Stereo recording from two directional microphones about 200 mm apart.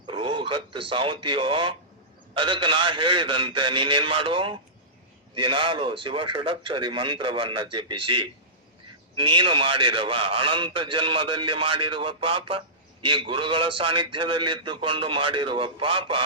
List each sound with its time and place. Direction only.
0.1 s a man's voice: 25° right (ahead or behind)